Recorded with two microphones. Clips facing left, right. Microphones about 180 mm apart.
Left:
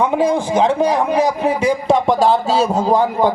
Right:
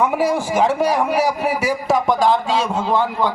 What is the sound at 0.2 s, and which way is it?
A man's voice, 10° right (ahead or behind).